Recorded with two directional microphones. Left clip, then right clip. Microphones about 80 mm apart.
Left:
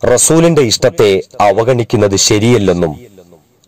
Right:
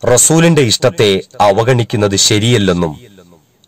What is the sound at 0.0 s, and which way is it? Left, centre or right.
Speech, left.